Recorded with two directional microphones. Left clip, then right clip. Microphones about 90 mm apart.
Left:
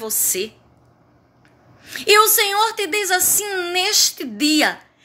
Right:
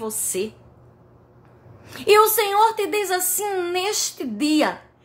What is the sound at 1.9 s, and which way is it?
A woman's voice, 45° right (ahead or behind).